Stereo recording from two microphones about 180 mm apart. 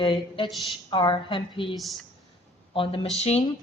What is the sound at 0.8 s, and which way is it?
Speech, 25° left (ahead or behind).